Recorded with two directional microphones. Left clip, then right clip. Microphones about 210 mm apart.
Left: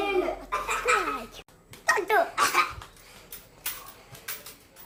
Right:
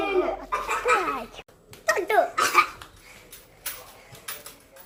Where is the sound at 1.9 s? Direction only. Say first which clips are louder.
Right 2 dB; 15° left (ahead or behind).